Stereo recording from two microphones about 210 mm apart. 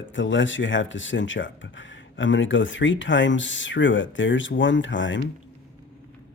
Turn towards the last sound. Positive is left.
turn(degrees=60)  # may be behind; listen again after turning